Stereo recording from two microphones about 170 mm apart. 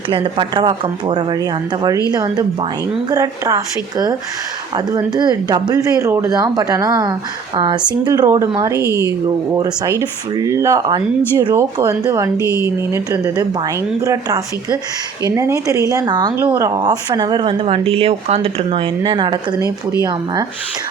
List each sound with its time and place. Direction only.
0.1 s speech: 30° right (ahead or behind)